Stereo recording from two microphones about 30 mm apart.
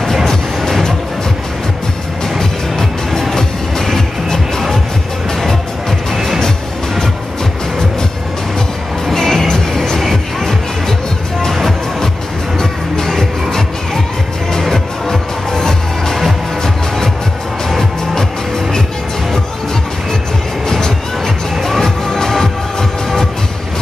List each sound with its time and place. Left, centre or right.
0.0 s music: centre
3.3 s music: centre
9.0 s music: centre
12.5 s music: centre
14.7 s music: centre
20.6 s music: centre